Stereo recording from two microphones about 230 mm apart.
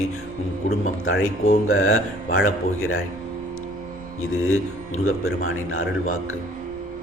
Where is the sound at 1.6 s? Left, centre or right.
Left.